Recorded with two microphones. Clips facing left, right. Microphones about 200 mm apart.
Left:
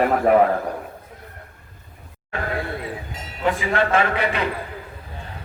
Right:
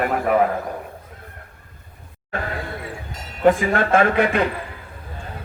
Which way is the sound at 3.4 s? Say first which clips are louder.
Right 4 dB; 50° right (ahead or behind).